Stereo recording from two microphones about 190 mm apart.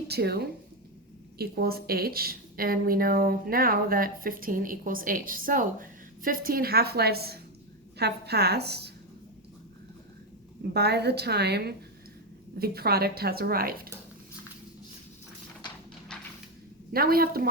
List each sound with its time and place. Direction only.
0.1 s a woman's voice: 55° right (ahead or behind)
10.6 s a woman's voice: 60° right (ahead or behind)
16.9 s a woman's voice: 50° right (ahead or behind)